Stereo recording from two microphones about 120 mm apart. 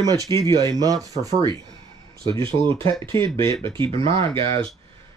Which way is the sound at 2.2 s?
45° right (ahead or behind).